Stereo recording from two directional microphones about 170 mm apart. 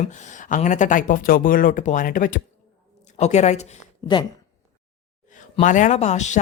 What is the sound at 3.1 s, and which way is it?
Speech, 40° left (ahead or behind).